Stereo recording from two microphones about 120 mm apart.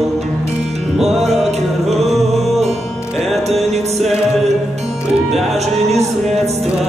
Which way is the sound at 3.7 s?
65° right (ahead or behind).